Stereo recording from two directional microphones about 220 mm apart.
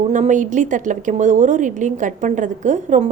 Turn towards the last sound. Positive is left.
turn(degrees=-35)  # may be behind; listen again after turning